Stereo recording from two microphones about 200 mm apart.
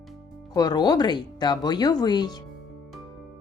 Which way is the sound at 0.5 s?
20° left (ahead or behind).